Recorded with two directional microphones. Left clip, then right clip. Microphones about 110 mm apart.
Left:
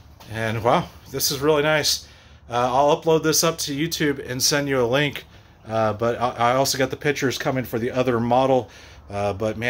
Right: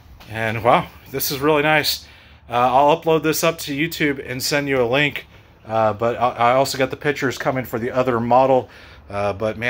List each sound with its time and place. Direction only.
0.3 s speech: 20° left (ahead or behind); by 9.7 s 35° left (ahead or behind)